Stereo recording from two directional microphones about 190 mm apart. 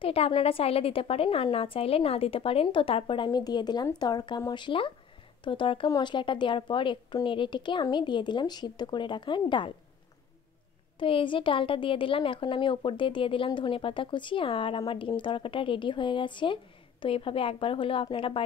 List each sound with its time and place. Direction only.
0.0 s a woman's voice: 30° left (ahead or behind)
11.0 s a woman's voice: 25° left (ahead or behind)